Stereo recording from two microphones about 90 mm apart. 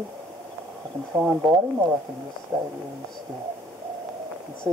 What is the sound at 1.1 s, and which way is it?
Speech, 5° right (ahead or behind).